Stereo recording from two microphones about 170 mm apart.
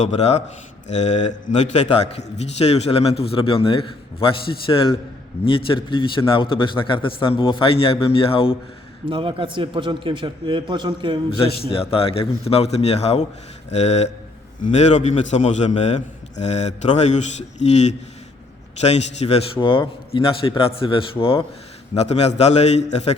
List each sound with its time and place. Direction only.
0.2 s a man's voice: 40° left (ahead or behind)
9.0 s a man's voice: 30° right (ahead or behind)
11.7 s a man's voice: 35° left (ahead or behind)